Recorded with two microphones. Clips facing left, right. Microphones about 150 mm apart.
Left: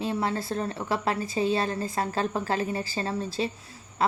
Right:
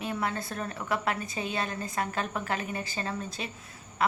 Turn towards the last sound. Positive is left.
turn(degrees=30)  # may be behind; listen again after turning